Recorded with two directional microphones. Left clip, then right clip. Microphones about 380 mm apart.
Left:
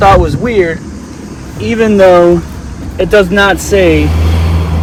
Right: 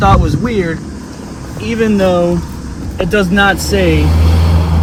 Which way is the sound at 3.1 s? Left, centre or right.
Left.